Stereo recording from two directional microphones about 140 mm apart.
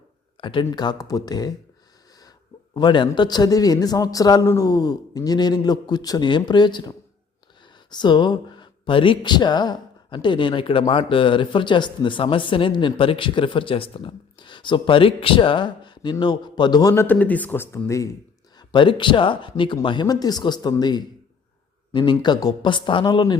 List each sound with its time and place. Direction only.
0.6 s a man's voice: 30° left (ahead or behind)
2.7 s a man's voice: 35° left (ahead or behind)
16.9 s speech: 15° left (ahead or behind)
18.7 s speech: 35° left (ahead or behind)